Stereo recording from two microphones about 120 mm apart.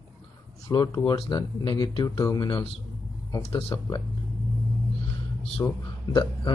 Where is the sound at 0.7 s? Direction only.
35° left (ahead or behind).